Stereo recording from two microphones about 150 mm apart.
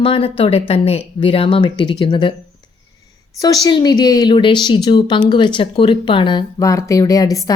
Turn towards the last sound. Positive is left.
turn(degrees=25)  # may be behind; listen again after turning